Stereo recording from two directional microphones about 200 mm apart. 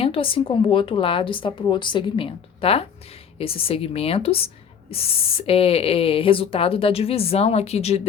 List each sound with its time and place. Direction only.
0.0 s speech: 30° left (ahead or behind)